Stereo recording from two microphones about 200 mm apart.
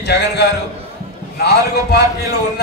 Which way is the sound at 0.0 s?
55° left (ahead or behind).